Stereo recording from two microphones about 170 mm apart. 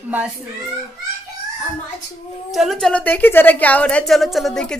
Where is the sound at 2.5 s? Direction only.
Centre (ahead or behind).